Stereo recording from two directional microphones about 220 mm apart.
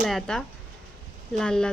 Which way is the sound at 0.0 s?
Centre (ahead or behind).